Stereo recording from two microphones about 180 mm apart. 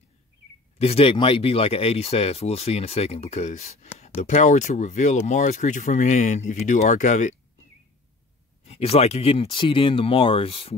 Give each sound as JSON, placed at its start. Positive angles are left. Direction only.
{"t": 0.7, "sound": "speech", "side_deg": 35}
{"t": 8.6, "sound": "speech", "side_deg": 35}